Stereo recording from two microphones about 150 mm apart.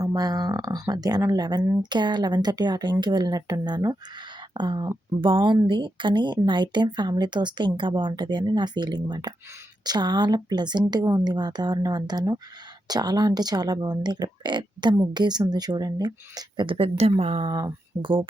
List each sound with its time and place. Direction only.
0.0 s speech: 25° right (ahead or behind)